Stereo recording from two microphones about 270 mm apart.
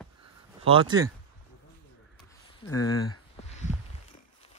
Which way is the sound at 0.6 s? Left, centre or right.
Centre.